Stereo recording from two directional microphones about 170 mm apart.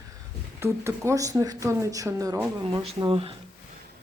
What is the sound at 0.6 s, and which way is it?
Speech, 15° right (ahead or behind).